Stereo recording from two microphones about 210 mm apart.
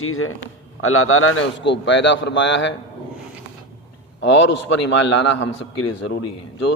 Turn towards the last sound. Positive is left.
turn(degrees=60)  # may be behind; listen again after turning